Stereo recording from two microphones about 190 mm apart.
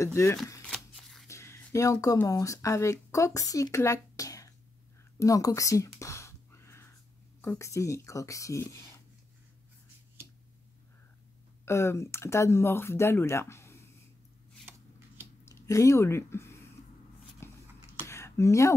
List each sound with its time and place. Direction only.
0.0 s speech: 15° left (ahead or behind)
0.7 s shuffling cards: centre (ahead or behind)
1.2 s speech: 15° left (ahead or behind)
5.2 s a sound: 15° left (ahead or behind)
7.4 s speech: 15° left (ahead or behind)
11.6 s speech: 15° left (ahead or behind)
15.4 s speech: 15° left (ahead or behind)
17.4 s a sound: 15° left (ahead or behind)